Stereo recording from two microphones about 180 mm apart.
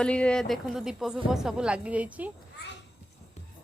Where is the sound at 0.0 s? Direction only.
5° left (ahead or behind).